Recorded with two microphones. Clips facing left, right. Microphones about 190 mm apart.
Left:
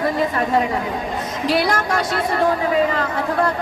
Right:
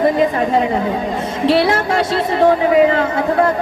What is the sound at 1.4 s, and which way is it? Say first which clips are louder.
Speech: right 5 dB; 25° right (ahead or behind).